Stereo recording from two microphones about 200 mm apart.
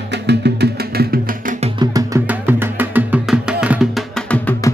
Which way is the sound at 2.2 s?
10° right (ahead or behind).